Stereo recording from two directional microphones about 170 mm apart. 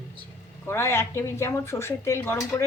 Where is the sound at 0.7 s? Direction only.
15° left (ahead or behind).